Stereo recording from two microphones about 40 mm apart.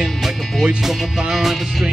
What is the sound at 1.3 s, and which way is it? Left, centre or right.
Speech, centre.